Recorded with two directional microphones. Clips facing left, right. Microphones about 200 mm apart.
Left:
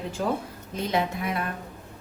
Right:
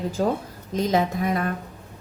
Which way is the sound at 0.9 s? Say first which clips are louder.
Right 4 dB; 40° right (ahead or behind).